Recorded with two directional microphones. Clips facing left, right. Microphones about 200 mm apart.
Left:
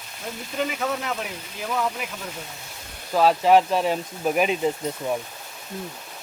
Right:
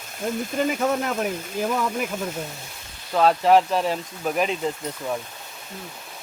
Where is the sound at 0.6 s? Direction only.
45° right (ahead or behind).